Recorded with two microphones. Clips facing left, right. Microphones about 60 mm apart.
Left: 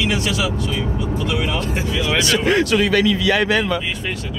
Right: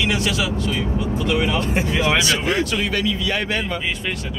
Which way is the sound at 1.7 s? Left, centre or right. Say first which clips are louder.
Right 2 dB; right.